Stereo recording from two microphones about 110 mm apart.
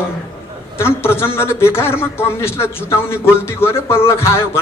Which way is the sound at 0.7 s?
20° left (ahead or behind).